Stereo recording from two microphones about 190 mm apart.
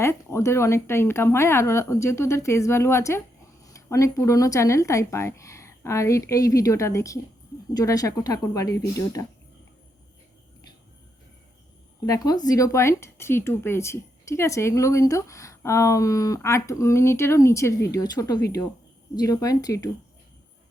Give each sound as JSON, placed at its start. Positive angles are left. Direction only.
{"t": 0.0, "sound": "speech", "side_deg": 15}
{"t": 12.0, "sound": "speech", "side_deg": 20}